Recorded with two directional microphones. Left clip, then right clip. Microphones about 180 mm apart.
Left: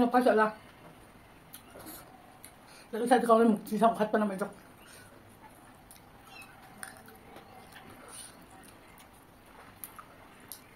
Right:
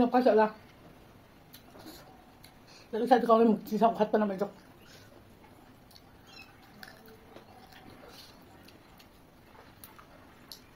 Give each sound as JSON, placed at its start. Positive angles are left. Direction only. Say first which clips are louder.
{"t": 0.0, "sound": "speech", "louder": "right 1 dB", "side_deg": -10}
{"t": 2.9, "sound": "speech", "louder": "even", "side_deg": -10}